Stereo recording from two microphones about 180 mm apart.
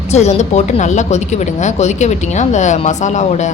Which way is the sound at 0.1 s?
40° left (ahead or behind).